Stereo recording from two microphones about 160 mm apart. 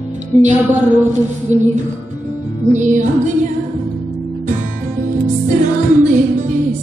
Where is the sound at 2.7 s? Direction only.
50° right (ahead or behind).